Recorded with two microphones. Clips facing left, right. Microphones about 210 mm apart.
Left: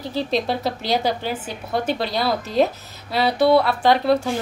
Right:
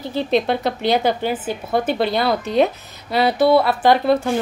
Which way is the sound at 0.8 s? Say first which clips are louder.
Right 5 dB; 55° right (ahead or behind).